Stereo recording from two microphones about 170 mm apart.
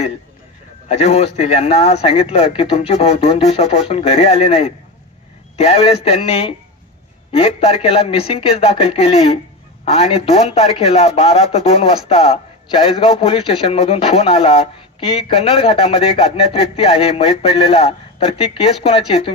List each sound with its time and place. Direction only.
0.9 s a man's voice: 35° left (ahead or behind)